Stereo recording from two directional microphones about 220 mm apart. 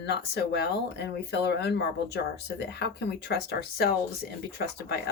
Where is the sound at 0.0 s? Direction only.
50° left (ahead or behind).